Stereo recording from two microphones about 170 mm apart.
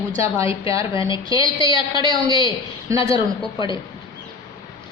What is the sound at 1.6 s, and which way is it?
A woman's voice, 20° right (ahead or behind).